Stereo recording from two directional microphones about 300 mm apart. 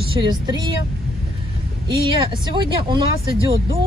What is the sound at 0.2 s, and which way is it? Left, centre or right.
Speech, centre.